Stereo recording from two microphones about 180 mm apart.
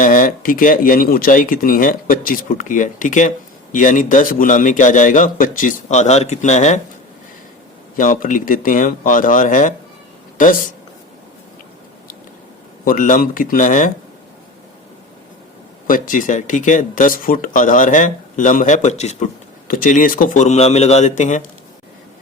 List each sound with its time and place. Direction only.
0.0 s speech: 50° left (ahead or behind)
7.9 s speech: 50° left (ahead or behind)
12.8 s speech: 50° left (ahead or behind)
15.9 s speech: 50° left (ahead or behind)